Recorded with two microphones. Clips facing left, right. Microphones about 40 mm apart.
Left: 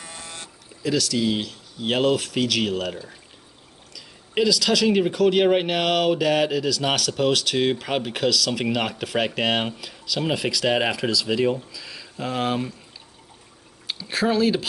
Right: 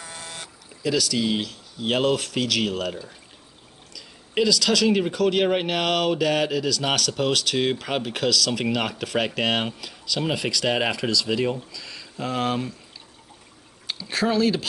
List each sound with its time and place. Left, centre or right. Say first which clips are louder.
0.8 s speech: left 1 dB; centre
13.8 s speech: left 1 dB; centre